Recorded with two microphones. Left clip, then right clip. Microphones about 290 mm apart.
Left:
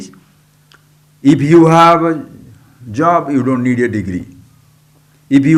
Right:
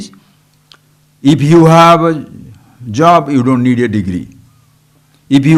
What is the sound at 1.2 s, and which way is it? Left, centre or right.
A man's voice, right.